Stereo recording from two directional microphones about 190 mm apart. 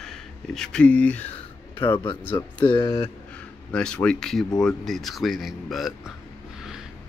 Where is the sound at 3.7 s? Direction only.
5° left (ahead or behind).